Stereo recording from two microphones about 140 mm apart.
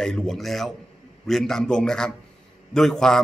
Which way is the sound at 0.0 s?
5° left (ahead or behind).